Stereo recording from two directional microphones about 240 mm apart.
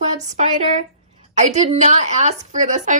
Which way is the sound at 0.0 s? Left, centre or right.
Right.